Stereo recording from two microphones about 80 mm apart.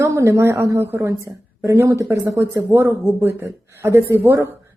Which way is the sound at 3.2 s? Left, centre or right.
Right.